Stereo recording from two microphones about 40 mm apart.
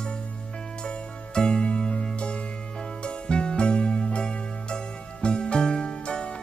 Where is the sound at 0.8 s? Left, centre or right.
Left.